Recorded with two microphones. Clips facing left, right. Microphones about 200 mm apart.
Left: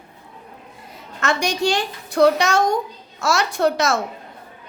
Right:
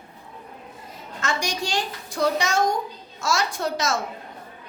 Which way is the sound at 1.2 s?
65° left (ahead or behind).